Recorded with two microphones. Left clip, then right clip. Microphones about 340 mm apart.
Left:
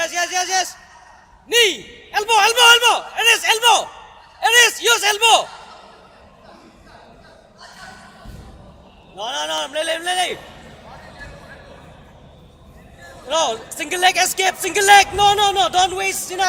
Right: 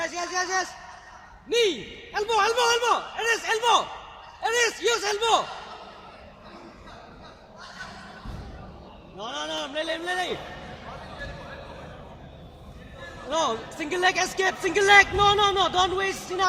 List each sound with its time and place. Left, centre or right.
0.0 s a sound: left
1.5 s speech: left
9.1 s speech: left
13.3 s speech: left